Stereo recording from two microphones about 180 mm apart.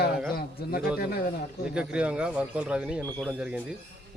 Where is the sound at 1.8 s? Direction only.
5° right (ahead or behind).